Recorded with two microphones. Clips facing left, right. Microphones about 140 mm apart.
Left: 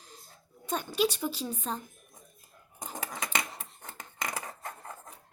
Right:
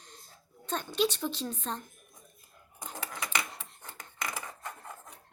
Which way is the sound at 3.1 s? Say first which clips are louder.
Left 1 dB; 20° left (ahead or behind).